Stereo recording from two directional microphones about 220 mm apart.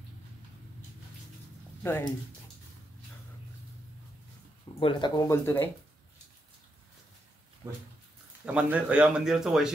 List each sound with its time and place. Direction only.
1.8 s speech: 10° left (ahead or behind)
4.7 s speech: 25° left (ahead or behind)
8.5 s speech: 5° right (ahead or behind)